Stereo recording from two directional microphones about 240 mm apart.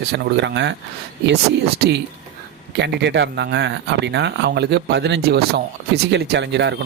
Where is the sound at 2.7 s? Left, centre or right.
Right.